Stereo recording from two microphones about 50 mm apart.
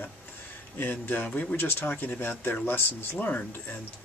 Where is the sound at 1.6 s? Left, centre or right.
Left.